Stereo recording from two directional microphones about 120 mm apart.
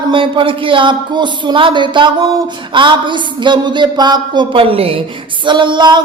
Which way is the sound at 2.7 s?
45° right (ahead or behind).